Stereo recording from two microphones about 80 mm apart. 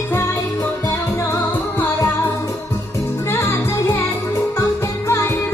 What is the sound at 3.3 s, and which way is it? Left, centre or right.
Music, left.